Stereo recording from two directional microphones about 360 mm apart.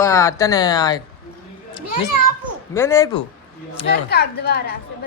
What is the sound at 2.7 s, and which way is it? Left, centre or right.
Speech, centre.